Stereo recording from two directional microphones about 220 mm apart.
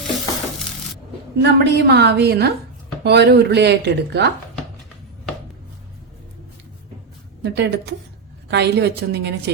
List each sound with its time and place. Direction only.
1.4 s speech: 50° right (ahead or behind)
7.4 s speech: 50° right (ahead or behind)